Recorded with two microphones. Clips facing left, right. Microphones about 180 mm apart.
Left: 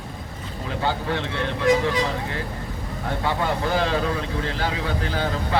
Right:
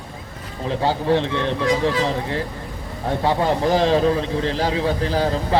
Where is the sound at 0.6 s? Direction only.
30° right (ahead or behind).